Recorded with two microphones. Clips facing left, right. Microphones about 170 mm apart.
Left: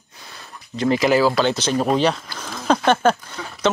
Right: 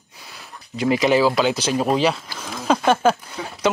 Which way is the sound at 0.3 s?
5° right (ahead or behind).